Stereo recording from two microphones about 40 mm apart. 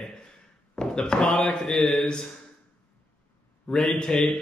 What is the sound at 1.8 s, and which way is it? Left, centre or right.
Speech, centre.